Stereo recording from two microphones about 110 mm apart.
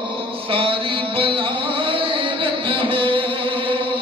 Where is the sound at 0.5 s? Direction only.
55° right (ahead or behind).